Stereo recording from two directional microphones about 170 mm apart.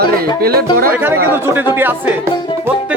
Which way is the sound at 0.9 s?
15° right (ahead or behind).